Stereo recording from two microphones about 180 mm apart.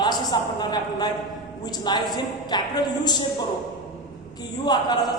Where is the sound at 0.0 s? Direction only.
25° left (ahead or behind).